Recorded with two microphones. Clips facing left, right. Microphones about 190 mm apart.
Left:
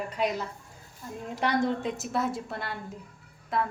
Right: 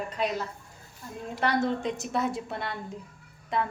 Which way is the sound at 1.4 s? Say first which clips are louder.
Even; 15° left (ahead or behind).